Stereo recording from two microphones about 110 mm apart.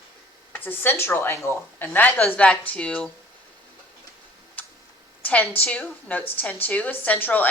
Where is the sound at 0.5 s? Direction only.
20° left (ahead or behind).